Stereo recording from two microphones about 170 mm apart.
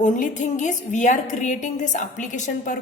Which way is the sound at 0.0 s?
45° left (ahead or behind).